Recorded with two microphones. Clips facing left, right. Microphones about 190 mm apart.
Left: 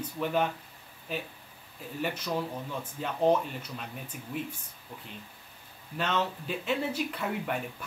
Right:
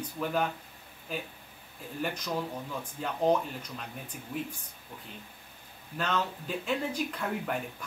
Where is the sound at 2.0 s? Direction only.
5° left (ahead or behind).